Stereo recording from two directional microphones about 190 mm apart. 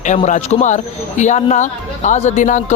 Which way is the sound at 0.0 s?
40° left (ahead or behind).